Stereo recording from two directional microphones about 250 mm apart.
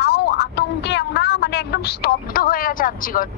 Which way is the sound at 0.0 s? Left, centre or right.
Left.